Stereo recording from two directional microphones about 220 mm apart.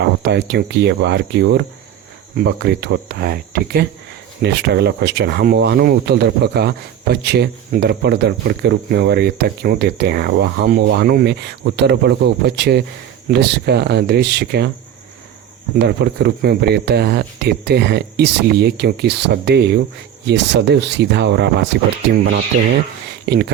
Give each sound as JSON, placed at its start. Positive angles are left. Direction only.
{"t": 0.0, "sound": "speech", "side_deg": -50}
{"t": 15.8, "sound": "speech", "side_deg": -50}
{"t": 23.2, "sound": "speech", "side_deg": -50}